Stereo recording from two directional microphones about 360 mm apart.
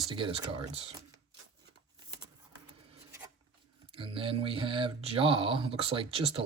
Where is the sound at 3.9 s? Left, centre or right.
Centre.